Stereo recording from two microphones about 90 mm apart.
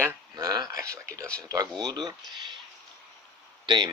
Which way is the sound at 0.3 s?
45° right (ahead or behind).